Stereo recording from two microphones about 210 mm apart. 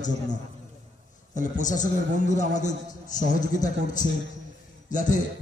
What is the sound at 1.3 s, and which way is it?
A man's voice, 35° left (ahead or behind).